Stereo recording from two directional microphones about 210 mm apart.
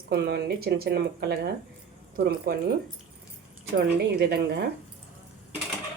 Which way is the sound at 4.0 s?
50° right (ahead or behind).